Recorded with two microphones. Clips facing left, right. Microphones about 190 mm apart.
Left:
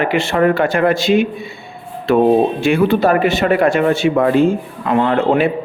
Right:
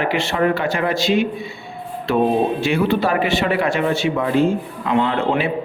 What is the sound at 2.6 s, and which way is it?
A man's voice, 50° left (ahead or behind).